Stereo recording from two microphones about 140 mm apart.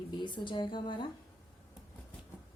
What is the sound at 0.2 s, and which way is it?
Speech, 35° left (ahead or behind).